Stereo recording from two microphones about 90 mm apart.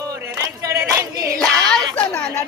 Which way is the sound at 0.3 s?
35° right (ahead or behind).